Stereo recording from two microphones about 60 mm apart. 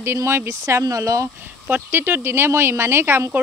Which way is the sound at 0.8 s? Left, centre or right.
Right.